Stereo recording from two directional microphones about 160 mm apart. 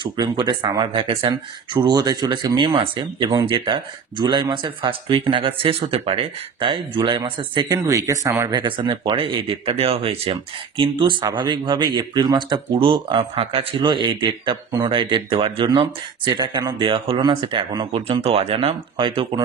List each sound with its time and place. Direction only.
0.0 s speech: 30° right (ahead or behind)